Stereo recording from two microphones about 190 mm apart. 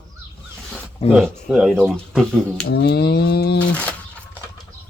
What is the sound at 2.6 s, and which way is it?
A man's voice, 60° left (ahead or behind).